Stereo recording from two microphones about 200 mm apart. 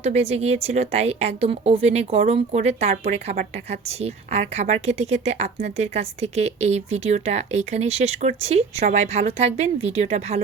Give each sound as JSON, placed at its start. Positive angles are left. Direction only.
{"t": 0.0, "sound": "a woman's voice", "side_deg": -30}